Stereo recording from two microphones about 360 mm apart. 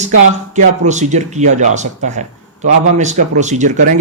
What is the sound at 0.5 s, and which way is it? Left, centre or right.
Speech, centre.